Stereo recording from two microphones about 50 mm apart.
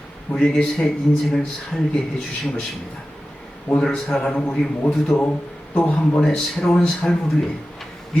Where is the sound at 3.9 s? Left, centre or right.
Centre.